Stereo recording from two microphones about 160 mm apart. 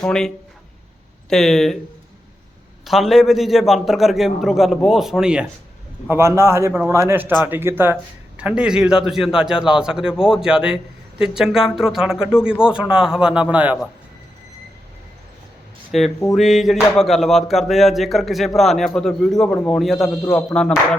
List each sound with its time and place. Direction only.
0.0 s a man's voice: 5° left (ahead or behind)
2.8 s a man's voice: centre (ahead or behind)
6.1 s a man's voice: 15° right (ahead or behind)
15.9 s a man's voice: centre (ahead or behind)